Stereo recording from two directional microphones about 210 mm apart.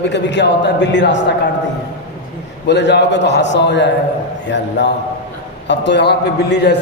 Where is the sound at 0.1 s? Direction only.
55° left (ahead or behind).